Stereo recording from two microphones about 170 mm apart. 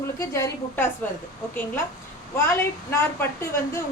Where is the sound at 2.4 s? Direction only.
15° left (ahead or behind).